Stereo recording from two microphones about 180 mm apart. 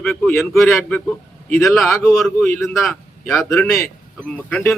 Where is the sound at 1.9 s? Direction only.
15° left (ahead or behind).